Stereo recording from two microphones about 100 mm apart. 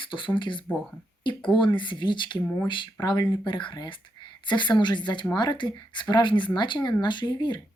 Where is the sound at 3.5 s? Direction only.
55° left (ahead or behind).